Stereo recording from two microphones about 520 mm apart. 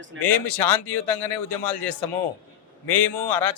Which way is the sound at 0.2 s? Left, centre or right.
Left.